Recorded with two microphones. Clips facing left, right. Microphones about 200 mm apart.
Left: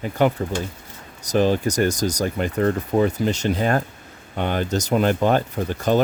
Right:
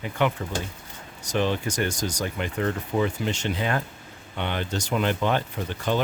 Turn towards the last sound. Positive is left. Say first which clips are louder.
# left 6 dB
turn(degrees=45)  # may be behind; listen again after turning